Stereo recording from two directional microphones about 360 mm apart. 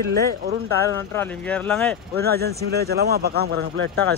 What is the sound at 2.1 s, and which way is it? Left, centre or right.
Speech, right.